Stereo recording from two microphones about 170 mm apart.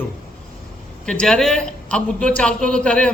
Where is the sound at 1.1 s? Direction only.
5° left (ahead or behind).